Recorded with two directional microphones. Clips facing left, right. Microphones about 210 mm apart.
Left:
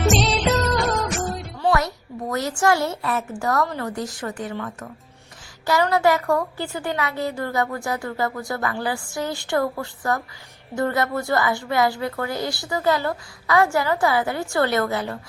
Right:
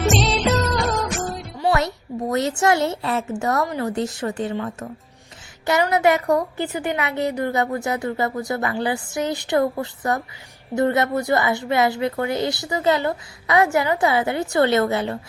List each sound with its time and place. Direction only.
0.1 s music: centre (ahead or behind)
2.3 s a woman's voice: 25° right (ahead or behind)